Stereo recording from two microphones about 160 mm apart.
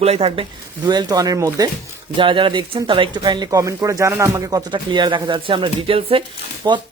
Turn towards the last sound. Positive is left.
turn(degrees=-25)  # may be behind; listen again after turning